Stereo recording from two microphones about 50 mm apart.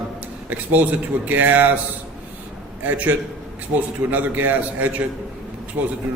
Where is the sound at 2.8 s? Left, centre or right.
Right.